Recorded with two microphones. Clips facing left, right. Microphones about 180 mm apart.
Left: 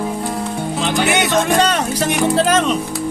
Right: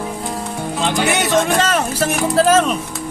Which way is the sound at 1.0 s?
Centre (ahead or behind).